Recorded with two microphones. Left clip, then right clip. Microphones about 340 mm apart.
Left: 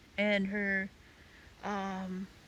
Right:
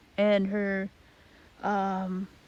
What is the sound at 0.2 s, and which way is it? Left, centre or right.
Speech, right.